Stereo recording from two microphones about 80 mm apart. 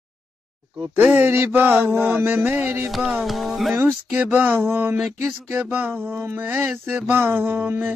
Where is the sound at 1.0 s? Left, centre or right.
Centre.